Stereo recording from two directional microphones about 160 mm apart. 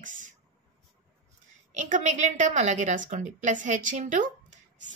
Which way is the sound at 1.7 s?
50° right (ahead or behind).